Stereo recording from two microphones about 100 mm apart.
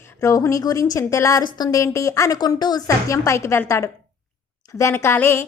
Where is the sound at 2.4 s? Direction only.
45° left (ahead or behind).